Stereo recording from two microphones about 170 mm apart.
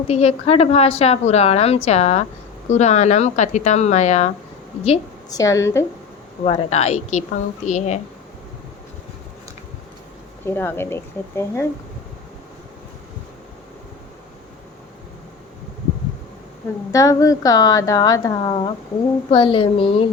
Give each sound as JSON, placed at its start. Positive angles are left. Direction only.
{"t": 0.1, "sound": "a woman's voice", "side_deg": 35}
{"t": 5.3, "sound": "a woman's voice", "side_deg": 20}
{"t": 6.4, "sound": "a woman's voice", "side_deg": 40}
{"t": 10.4, "sound": "speech", "side_deg": 10}
{"t": 16.9, "sound": "a woman's voice", "side_deg": 20}